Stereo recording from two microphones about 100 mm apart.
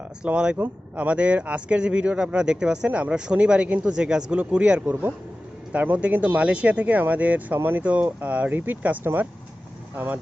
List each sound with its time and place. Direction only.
0.2 s speech: 10° right (ahead or behind)